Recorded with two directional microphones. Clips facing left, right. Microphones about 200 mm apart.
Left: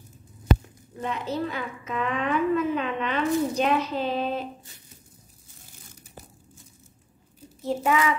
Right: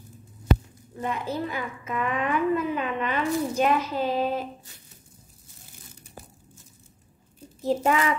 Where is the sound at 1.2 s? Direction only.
10° right (ahead or behind).